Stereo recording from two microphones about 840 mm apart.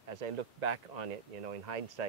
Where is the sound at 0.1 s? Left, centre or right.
Right.